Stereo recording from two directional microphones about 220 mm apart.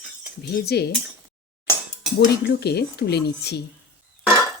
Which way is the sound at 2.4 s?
50° left (ahead or behind).